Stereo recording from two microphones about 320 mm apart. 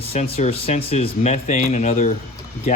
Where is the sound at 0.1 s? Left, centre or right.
Centre.